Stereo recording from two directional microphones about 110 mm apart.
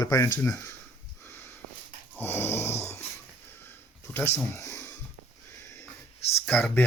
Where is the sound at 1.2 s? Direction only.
20° left (ahead or behind).